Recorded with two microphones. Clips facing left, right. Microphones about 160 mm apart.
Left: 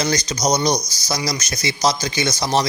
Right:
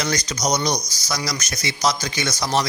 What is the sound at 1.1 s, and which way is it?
Speech, 25° left (ahead or behind).